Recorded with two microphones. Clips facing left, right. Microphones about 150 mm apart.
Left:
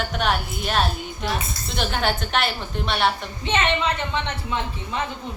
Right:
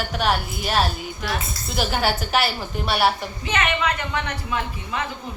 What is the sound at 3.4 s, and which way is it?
A woman's voice, 25° left (ahead or behind).